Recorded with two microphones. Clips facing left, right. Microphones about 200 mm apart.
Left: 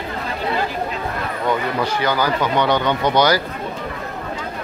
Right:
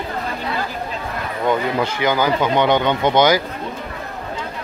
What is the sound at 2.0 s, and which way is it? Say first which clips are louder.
Speech: right 3 dB; 20° right (ahead or behind).